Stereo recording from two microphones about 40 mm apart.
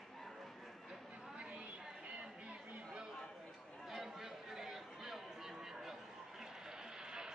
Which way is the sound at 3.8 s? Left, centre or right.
Centre.